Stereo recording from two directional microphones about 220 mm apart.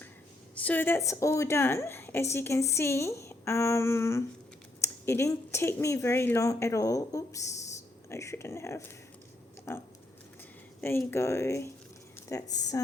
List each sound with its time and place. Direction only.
0.5 s speech: 5° left (ahead or behind)